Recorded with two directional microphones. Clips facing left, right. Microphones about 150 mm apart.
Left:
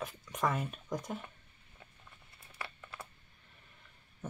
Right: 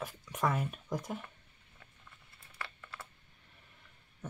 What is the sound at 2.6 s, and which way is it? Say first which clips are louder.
Computer keyboard: left 1 dB; 20° left (ahead or behind).